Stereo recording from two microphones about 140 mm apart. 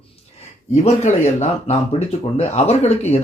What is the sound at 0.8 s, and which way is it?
Speech, 55° left (ahead or behind).